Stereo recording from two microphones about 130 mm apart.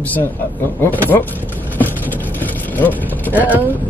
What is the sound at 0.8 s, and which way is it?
Speech, 15° left (ahead or behind).